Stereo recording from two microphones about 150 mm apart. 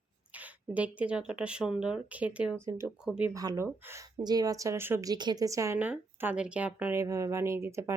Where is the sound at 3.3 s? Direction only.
20° right (ahead or behind).